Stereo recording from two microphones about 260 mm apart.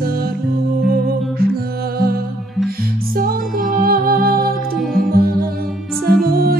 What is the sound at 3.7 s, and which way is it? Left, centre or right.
Music, right.